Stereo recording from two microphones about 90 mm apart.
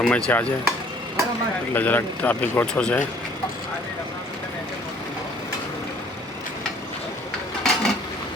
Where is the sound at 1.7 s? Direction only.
20° left (ahead or behind).